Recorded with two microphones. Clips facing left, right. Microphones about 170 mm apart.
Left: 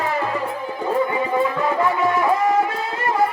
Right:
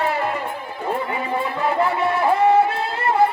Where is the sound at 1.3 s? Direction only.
35° right (ahead or behind).